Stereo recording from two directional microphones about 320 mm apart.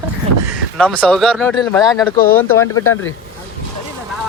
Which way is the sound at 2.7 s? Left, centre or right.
Left.